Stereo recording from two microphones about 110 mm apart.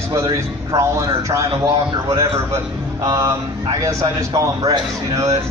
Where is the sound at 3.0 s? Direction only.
30° right (ahead or behind).